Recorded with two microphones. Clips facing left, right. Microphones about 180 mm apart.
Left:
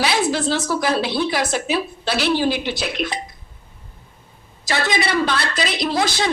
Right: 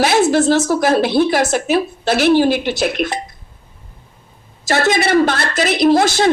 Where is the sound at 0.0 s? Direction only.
50° right (ahead or behind).